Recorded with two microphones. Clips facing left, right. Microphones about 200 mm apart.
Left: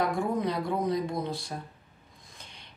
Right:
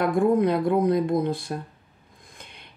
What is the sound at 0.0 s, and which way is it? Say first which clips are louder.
Speech: right 8 dB; 55° right (ahead or behind).